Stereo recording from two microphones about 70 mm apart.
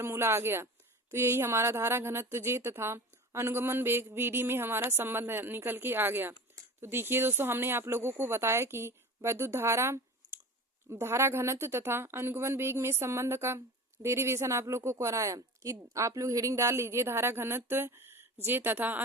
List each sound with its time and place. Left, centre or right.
0.0 s a woman's voice: right